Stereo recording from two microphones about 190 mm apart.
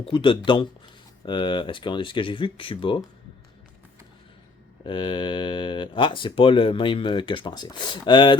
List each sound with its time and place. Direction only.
0.0 s speech: 25° left (ahead or behind)
4.8 s speech: 25° left (ahead or behind)